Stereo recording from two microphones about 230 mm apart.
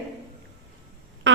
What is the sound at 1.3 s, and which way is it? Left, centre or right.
Fart, right.